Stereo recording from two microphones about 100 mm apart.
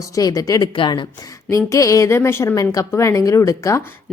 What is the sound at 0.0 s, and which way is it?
Speech, 35° left (ahead or behind).